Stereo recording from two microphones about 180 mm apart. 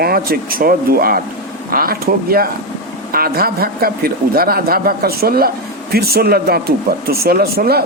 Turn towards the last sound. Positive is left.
turn(degrees=-60)  # may be behind; listen again after turning